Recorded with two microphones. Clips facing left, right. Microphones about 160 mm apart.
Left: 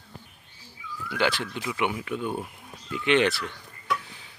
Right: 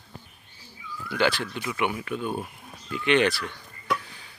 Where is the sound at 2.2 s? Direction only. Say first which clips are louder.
Right 1 dB; 20° right (ahead or behind).